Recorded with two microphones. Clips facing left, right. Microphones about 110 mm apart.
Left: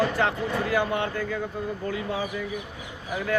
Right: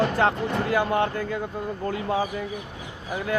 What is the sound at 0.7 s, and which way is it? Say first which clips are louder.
Speech: right 3 dB; 45° right (ahead or behind).